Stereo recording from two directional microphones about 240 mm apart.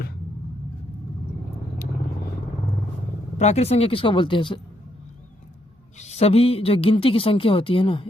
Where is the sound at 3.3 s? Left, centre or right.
Left.